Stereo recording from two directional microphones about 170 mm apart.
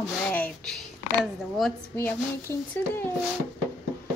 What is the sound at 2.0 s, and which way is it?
Speech, 15° left (ahead or behind).